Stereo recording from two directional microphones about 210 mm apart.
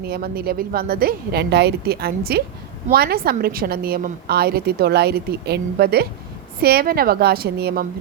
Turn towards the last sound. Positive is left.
turn(degrees=-50)  # may be behind; listen again after turning